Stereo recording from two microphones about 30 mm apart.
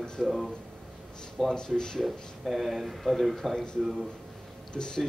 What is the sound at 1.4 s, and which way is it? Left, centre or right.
Speech, centre.